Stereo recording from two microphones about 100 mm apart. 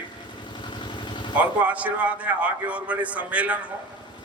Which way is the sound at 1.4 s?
15° right (ahead or behind).